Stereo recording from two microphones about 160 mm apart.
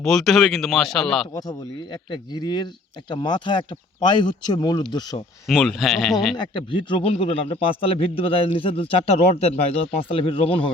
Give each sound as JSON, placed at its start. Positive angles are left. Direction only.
{"t": 0.0, "sound": "speech", "side_deg": 0}
{"t": 1.3, "sound": "speech", "side_deg": 25}
{"t": 5.5, "sound": "speech", "side_deg": 0}
{"t": 6.3, "sound": "a man's voice", "side_deg": 30}